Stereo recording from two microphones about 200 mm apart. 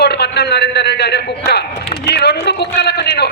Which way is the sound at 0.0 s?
55° left (ahead or behind).